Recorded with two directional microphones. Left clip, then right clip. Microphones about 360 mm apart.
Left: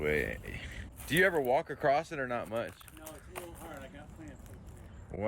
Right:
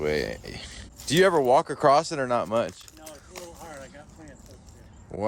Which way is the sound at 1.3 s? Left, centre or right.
Right.